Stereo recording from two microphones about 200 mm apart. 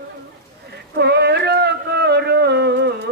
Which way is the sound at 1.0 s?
55° right (ahead or behind).